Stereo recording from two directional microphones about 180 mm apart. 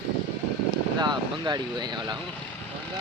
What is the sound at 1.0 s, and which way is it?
Speech, 25° right (ahead or behind).